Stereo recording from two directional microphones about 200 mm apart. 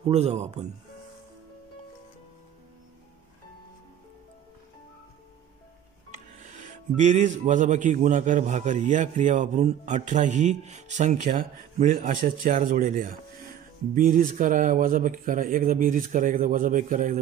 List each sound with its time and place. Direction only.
0.1 s speech: 35° right (ahead or behind)
6.1 s speech: 40° right (ahead or behind)